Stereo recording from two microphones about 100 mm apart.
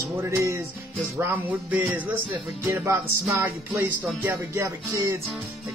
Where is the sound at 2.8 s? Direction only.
30° right (ahead or behind).